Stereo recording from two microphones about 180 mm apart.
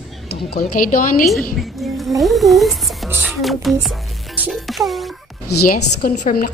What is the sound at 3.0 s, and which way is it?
Speech, 10° right (ahead or behind).